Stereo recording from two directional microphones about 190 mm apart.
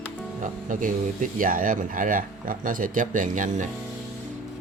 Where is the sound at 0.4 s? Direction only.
45° right (ahead or behind).